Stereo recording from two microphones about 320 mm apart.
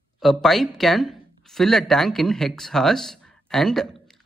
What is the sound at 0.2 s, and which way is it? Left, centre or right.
A man's voice, centre.